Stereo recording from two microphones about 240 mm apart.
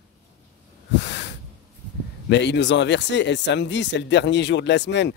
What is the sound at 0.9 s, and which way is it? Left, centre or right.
Snort, left.